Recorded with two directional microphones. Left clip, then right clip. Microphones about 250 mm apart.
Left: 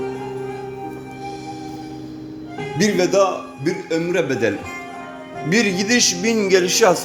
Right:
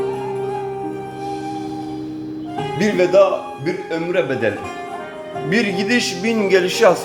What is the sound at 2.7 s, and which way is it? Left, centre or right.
Speech, left.